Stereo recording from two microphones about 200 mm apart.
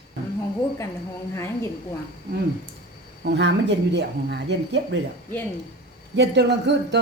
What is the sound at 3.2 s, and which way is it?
Speech, 60° right (ahead or behind).